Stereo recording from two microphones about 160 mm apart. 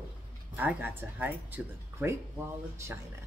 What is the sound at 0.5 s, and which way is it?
A woman's voice, 10° right (ahead or behind).